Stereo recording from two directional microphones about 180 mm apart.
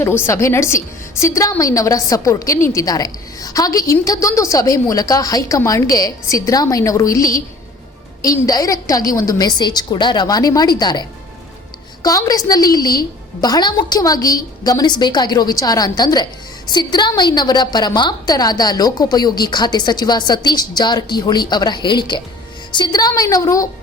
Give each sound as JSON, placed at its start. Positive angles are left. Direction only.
{"t": 0.0, "sound": "a woman's voice", "side_deg": 15}
{"t": 12.0, "sound": "a woman's voice", "side_deg": 20}